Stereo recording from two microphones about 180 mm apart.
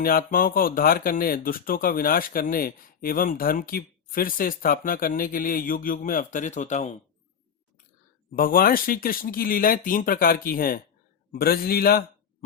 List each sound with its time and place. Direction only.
0.0 s speech: 55° left (ahead or behind)
8.3 s a man's voice: 50° left (ahead or behind)